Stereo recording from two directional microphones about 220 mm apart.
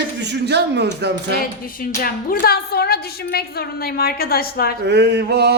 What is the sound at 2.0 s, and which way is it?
A woman's voice, 45° left (ahead or behind).